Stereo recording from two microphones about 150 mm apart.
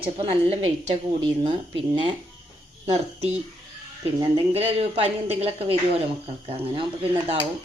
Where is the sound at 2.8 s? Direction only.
45° right (ahead or behind).